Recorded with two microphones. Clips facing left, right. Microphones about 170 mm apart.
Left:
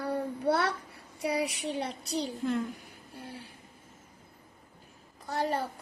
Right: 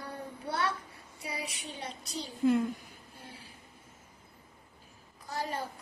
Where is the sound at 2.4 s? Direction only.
5° right (ahead or behind).